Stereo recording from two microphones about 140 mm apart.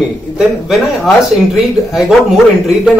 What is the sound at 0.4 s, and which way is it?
A man's voice, centre (ahead or behind).